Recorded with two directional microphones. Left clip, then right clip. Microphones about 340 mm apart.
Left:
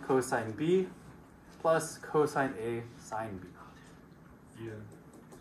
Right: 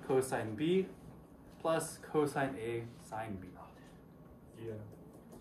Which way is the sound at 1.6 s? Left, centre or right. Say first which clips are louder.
Left 6 dB; centre.